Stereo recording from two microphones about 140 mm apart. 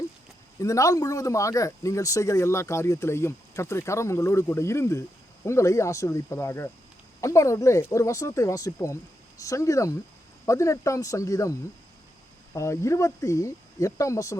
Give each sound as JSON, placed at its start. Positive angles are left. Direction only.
{"t": 0.6, "sound": "speech", "side_deg": 20}
{"t": 12.5, "sound": "speech", "side_deg": 20}